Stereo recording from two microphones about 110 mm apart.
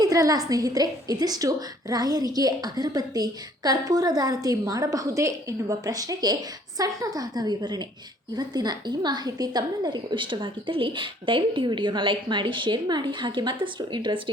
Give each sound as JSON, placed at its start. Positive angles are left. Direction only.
{"t": 0.0, "sound": "a woman's voice", "side_deg": -35}